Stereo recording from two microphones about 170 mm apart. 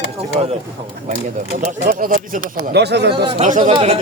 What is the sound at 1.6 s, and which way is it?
Speech, 50° right (ahead or behind).